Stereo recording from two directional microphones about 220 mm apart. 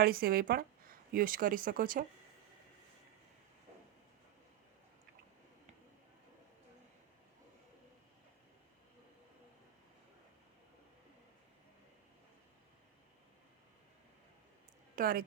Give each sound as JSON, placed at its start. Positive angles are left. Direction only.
{"t": 0.0, "sound": "a woman's voice", "side_deg": -40}
{"t": 14.9, "sound": "speech", "side_deg": -40}